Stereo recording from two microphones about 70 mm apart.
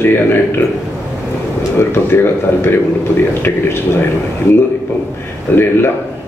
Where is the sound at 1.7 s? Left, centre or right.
Left.